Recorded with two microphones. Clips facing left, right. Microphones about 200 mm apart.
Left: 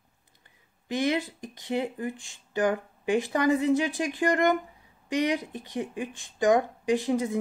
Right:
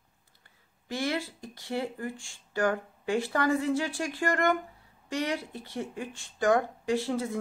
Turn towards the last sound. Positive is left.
turn(degrees=15)  # may be behind; listen again after turning